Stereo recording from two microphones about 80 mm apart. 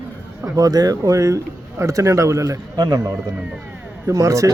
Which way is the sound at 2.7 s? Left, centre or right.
Right.